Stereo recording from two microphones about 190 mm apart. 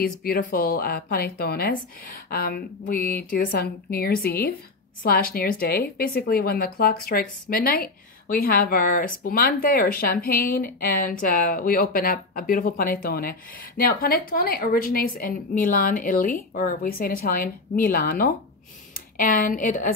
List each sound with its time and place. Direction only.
0.0 s a woman's voice: 50° left (ahead or behind)